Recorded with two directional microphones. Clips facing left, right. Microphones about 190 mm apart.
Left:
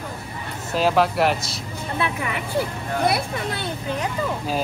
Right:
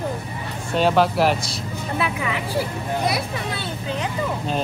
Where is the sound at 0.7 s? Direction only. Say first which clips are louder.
Right 1 dB; centre (ahead or behind).